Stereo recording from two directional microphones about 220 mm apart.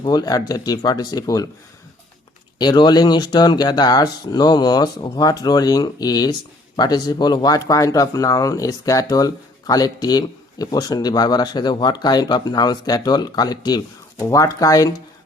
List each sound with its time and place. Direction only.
0.0 s speech: 20° left (ahead or behind)
2.6 s speech: 20° left (ahead or behind)